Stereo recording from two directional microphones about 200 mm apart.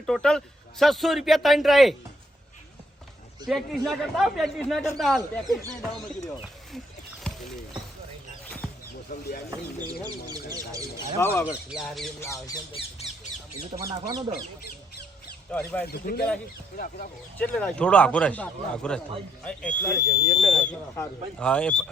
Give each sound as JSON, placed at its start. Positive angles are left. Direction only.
{"t": 0.0, "sound": "a man's voice", "side_deg": 5}
{"t": 3.4, "sound": "a man's voice", "side_deg": 0}
{"t": 6.1, "sound": "speech", "side_deg": 20}
{"t": 10.5, "sound": "speech", "side_deg": -15}
{"t": 10.9, "sound": "speech", "side_deg": 10}
{"t": 11.4, "sound": "a man's voice", "side_deg": -5}
{"t": 12.2, "sound": "speech", "side_deg": 15}
{"t": 13.8, "sound": "speech", "side_deg": -20}
{"t": 15.5, "sound": "speech", "side_deg": 5}
{"t": 15.9, "sound": "speech", "side_deg": 50}
{"t": 17.3, "sound": "a man's voice", "side_deg": 5}